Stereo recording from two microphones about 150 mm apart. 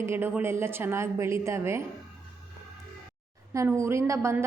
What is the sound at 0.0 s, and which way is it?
A woman's voice, 15° right (ahead or behind).